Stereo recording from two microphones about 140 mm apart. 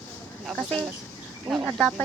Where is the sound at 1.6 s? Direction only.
5° left (ahead or behind).